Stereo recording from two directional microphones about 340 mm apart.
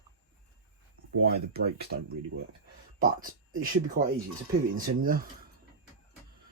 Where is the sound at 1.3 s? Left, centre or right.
Right.